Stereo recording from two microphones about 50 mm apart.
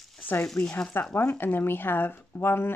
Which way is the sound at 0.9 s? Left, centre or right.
Left.